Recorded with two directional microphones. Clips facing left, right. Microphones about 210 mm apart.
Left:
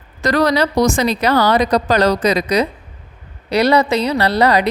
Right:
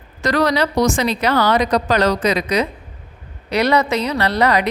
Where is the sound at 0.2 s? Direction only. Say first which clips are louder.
Left 2 dB; 40° left (ahead or behind).